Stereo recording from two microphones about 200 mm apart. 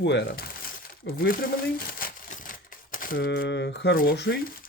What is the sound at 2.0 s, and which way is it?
Crumpling, 45° left (ahead or behind).